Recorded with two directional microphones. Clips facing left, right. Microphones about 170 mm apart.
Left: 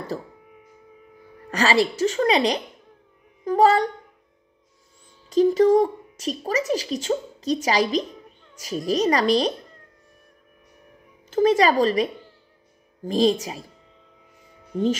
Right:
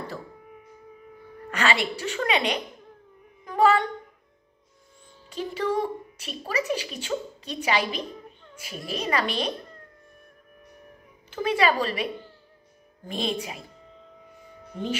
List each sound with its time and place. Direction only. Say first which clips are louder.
1.5 s a woman's voice: left 5 dB; 35° left (ahead or behind)
3.4 s a sound: left 4 dB; 40° left (ahead or behind)
5.3 s a woman's voice: left 11 dB; 40° left (ahead or behind)
11.2 s a woman's voice: left 6 dB; 40° left (ahead or behind)